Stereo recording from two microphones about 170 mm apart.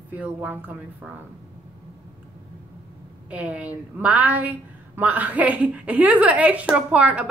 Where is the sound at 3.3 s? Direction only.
10° right (ahead or behind).